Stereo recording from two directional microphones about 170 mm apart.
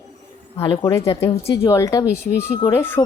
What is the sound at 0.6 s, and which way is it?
Speech, 15° left (ahead or behind).